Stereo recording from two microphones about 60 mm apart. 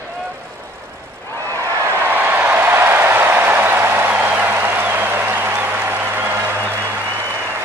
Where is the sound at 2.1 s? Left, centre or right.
Right.